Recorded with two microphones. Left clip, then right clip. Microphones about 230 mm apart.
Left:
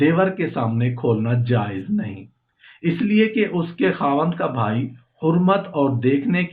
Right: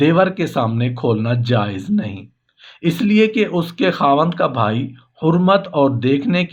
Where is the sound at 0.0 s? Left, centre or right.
Right.